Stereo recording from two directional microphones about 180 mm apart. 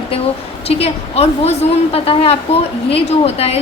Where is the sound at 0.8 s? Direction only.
35° left (ahead or behind).